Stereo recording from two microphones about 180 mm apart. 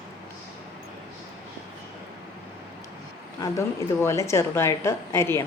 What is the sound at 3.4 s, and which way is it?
Speech, 15° left (ahead or behind).